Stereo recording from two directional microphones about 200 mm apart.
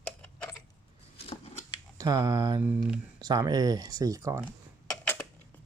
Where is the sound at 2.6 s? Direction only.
10° right (ahead or behind).